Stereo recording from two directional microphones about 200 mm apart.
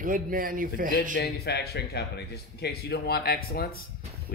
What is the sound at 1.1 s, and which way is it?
Speech, 55° left (ahead or behind).